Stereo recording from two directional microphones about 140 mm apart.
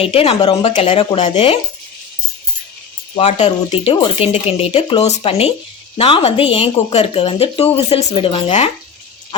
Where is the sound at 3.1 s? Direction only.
45° left (ahead or behind).